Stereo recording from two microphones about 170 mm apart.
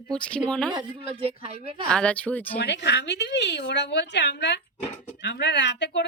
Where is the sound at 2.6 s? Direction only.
85° left.